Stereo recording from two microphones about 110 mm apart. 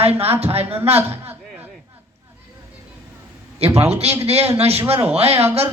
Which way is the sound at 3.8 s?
70° right (ahead or behind).